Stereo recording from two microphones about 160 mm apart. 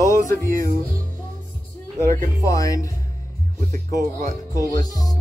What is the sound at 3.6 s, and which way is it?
Speech, 55° right (ahead or behind).